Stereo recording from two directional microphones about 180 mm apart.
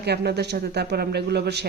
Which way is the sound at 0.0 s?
65° right (ahead or behind).